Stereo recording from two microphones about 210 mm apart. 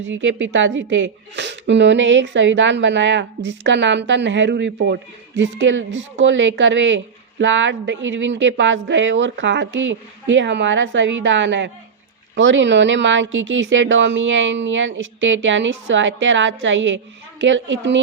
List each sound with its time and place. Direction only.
0.0 s a woman's voice: 60° right (ahead or behind)